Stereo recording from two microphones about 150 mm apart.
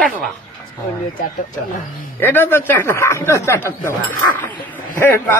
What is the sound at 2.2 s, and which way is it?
Speech, 15° left (ahead or behind).